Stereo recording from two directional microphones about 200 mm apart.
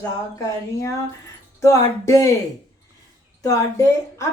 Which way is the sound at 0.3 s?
15° left (ahead or behind).